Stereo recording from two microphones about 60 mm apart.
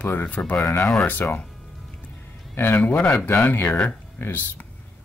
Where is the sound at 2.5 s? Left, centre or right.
Left.